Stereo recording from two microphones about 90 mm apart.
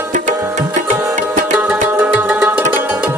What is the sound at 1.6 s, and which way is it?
Music, 15° right (ahead or behind).